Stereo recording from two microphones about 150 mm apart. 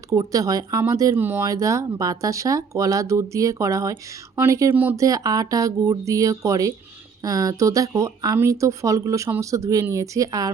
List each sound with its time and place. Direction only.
0.1 s speech: 25° right (ahead or behind)
4.9 s speech: 25° right (ahead or behind)